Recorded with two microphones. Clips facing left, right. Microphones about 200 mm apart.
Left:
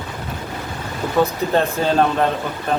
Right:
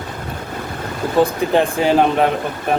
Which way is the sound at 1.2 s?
15° right (ahead or behind).